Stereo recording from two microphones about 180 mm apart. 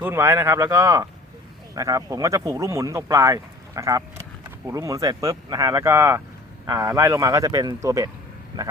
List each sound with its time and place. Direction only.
0.0 s speech: 15° right (ahead or behind)